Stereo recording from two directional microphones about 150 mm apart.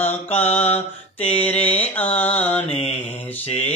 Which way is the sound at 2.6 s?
45° left (ahead or behind).